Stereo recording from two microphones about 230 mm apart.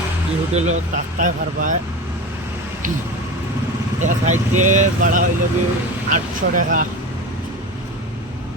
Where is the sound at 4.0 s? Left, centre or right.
Right.